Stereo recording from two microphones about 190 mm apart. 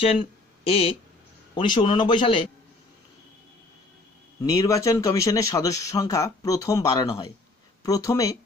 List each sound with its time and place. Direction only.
0.0 s a man's voice: 30° left (ahead or behind)
4.4 s speech: 20° left (ahead or behind)